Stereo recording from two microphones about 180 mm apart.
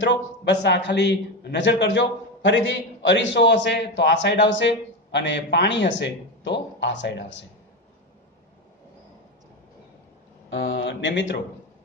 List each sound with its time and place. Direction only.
0.1 s a man's voice: 75° left (ahead or behind)
10.5 s a man's voice: 90° left